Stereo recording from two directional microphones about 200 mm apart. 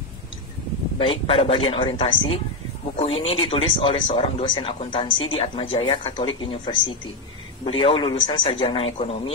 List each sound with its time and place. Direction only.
0.9 s speech: 25° left (ahead or behind)